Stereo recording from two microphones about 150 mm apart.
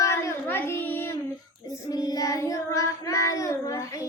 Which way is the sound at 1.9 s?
25° left (ahead or behind).